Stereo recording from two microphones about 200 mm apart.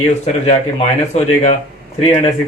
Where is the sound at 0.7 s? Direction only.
30° left (ahead or behind).